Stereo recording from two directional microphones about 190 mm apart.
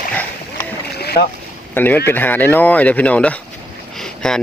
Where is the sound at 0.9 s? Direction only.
55° left (ahead or behind).